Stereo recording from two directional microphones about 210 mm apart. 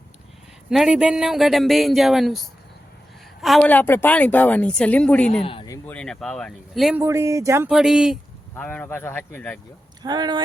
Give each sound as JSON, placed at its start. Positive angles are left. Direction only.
{"t": 0.7, "sound": "a woman's voice", "side_deg": -5}
{"t": 5.3, "sound": "speech", "side_deg": 25}
{"t": 7.0, "sound": "speech", "side_deg": -15}
{"t": 7.7, "sound": "a woman's voice", "side_deg": 0}
{"t": 10.0, "sound": "speech", "side_deg": -20}